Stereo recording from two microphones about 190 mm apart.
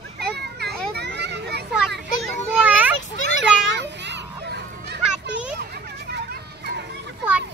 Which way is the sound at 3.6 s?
65° right (ahead or behind).